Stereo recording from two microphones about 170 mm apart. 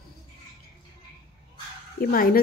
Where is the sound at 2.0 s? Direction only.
55° left (ahead or behind).